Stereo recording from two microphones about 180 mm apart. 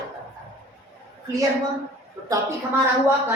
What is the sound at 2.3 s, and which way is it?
Speech, 15° right (ahead or behind).